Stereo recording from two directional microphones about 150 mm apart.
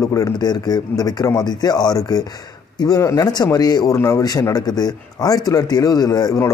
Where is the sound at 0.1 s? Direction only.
25° left (ahead or behind).